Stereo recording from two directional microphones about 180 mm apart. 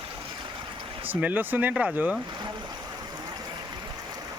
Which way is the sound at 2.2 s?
25° right (ahead or behind).